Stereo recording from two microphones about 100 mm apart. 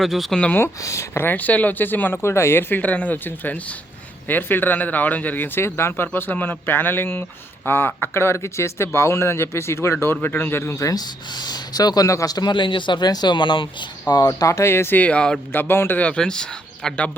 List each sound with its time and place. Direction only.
0.0 s speech: centre (ahead or behind)
0.3 s a man's voice: 15° left (ahead or behind)
0.6 s speech: 30° left (ahead or behind); by 15.4 s 10° left (ahead or behind)
15.5 s a man's voice: 20° left (ahead or behind)